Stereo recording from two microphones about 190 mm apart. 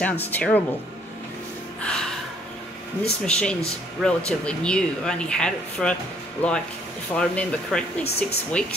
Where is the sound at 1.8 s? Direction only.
5° left (ahead or behind).